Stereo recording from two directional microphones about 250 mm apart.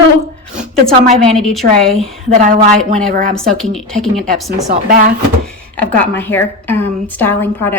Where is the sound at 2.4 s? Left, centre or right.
Right.